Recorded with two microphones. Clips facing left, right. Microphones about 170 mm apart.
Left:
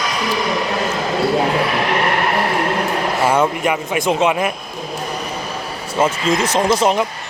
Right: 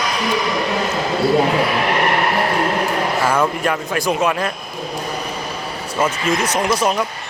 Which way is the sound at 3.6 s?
20° left (ahead or behind).